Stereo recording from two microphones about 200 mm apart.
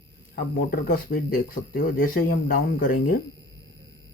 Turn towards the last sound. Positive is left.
turn(degrees=45)  # may be behind; listen again after turning